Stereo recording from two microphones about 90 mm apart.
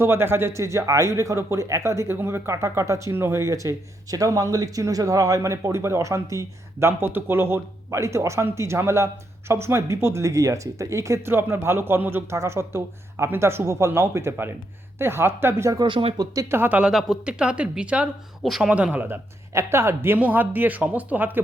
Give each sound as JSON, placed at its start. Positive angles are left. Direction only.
{"t": 0.0, "sound": "speech", "side_deg": -25}
{"t": 15.9, "sound": "speech", "side_deg": -75}
{"t": 16.1, "sound": "speech", "side_deg": -40}
{"t": 16.6, "sound": "speech", "side_deg": -20}
{"t": 16.9, "sound": "speech", "side_deg": 0}
{"t": 18.7, "sound": "speech", "side_deg": -15}